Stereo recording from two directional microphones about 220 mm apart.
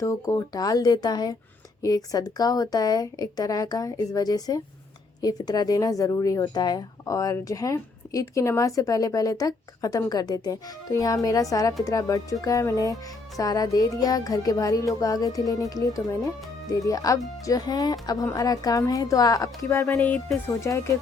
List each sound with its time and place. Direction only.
0.0 s speech: 15° left (ahead or behind)